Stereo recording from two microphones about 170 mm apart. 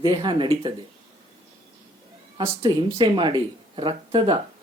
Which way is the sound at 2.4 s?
25° right (ahead or behind).